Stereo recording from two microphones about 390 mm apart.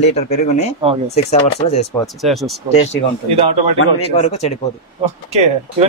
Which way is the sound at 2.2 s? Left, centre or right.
Centre.